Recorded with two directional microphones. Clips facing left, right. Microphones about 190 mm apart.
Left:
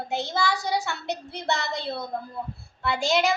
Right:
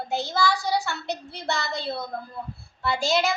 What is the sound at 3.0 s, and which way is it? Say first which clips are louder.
Speech: left 1 dB; 15° left (ahead or behind).